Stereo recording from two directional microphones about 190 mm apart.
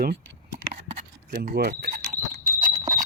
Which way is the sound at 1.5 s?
50° right (ahead or behind).